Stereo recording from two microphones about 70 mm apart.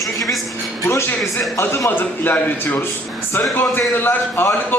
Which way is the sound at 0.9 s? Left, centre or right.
Left.